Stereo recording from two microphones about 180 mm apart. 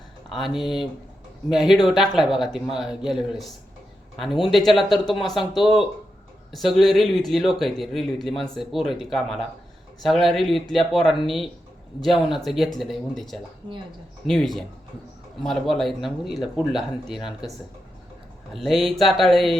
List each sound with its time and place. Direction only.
0.3 s a man's voice: centre (ahead or behind)
18.5 s a man's voice: centre (ahead or behind)